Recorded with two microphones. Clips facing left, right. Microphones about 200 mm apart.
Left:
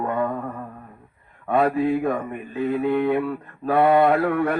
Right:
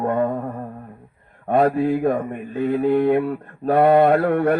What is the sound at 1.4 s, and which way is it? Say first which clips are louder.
Mantra: right 2 dB; 40° right (ahead or behind).